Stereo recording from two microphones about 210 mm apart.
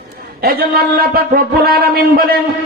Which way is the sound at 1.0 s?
45° right (ahead or behind).